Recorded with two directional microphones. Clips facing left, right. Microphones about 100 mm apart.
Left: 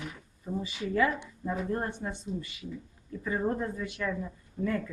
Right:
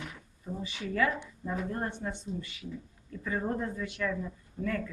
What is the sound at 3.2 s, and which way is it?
Speech, 15° left (ahead or behind).